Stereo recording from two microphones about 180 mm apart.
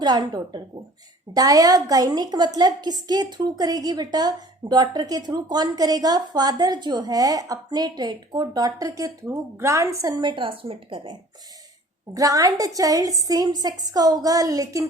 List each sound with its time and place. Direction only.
0.0 s a woman's voice: 20° right (ahead or behind)